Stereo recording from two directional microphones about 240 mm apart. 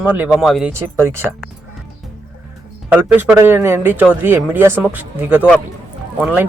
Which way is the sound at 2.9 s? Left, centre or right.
Centre.